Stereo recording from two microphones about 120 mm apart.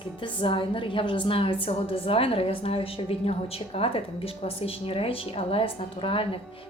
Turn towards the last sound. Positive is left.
turn(degrees=50)  # may be behind; listen again after turning